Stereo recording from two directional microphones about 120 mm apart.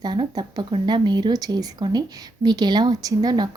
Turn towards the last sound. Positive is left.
turn(degrees=-35)  # may be behind; listen again after turning